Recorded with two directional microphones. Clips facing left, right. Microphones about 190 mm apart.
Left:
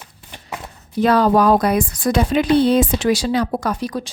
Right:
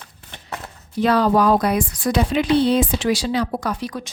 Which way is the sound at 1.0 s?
45° left (ahead or behind).